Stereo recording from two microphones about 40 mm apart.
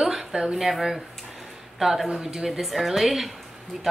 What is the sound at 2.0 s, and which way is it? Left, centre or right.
Speech, centre.